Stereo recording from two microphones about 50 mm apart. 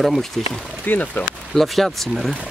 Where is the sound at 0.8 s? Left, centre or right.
Left.